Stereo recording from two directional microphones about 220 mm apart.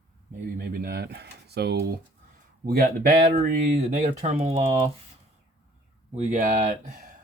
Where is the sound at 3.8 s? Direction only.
30° right (ahead or behind).